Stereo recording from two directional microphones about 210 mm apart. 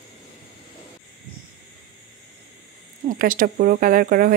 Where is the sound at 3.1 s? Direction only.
40° right (ahead or behind).